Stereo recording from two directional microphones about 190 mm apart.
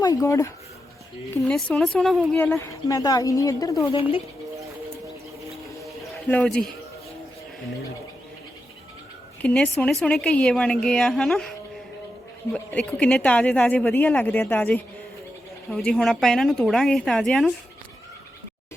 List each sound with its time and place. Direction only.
0.0 s a woman's voice: 20° left (ahead or behind)
1.4 s a woman's voice: 5° left (ahead or behind)
2.4 s a woman's voice: 15° left (ahead or behind)
6.0 s a sound: 10° left (ahead or behind)
9.4 s a woman's voice: 5° left (ahead or behind)
12.5 s a woman's voice: 5° left (ahead or behind)